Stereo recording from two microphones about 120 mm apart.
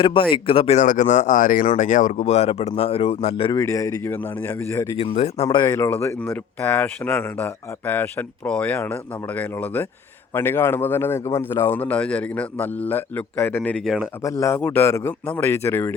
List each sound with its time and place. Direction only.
0.0 s speech: 45° left (ahead or behind)
0.8 s speech: 90° left; by 3.5 s 55° left (ahead or behind)
3.5 s a man's voice: 25° left (ahead or behind)
4.9 s speech: 60° left (ahead or behind)
5.7 s a man's voice: 20° left (ahead or behind); by 14.0 s 5° left (ahead or behind)
14.2 s a man's voice: 25° left (ahead or behind)